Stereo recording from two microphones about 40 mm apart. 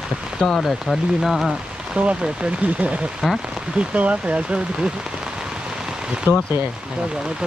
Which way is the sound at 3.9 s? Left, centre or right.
Right.